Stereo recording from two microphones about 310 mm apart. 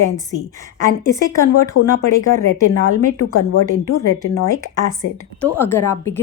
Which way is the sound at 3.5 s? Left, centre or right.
Left.